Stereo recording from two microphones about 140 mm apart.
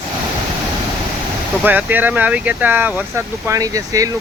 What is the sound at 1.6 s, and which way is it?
Speech, 15° right (ahead or behind).